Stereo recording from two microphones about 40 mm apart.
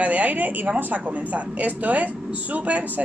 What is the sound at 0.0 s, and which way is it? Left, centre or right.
A woman's voice, right.